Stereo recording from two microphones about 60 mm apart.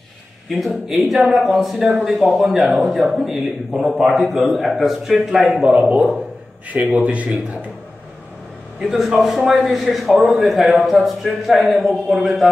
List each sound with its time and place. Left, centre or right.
0.5 s speech: centre
5.6 s a man's voice: centre
8.8 s speech: centre